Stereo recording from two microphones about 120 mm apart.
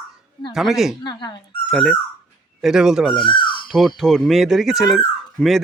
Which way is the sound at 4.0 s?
Centre (ahead or behind).